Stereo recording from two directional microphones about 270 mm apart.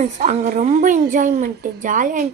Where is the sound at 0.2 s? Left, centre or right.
Right.